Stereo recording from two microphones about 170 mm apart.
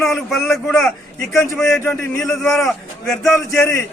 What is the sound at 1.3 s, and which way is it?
Speech, 15° left (ahead or behind).